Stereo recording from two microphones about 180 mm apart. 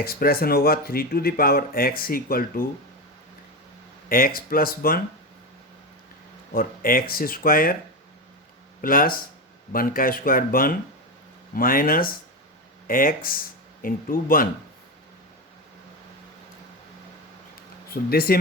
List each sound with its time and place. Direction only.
0.0 s speech: 55° left (ahead or behind)
4.1 s speech: 55° left (ahead or behind)
6.5 s speech: 55° left (ahead or behind)
8.8 s speech: 50° left (ahead or behind)
17.8 s speech: 55° left (ahead or behind)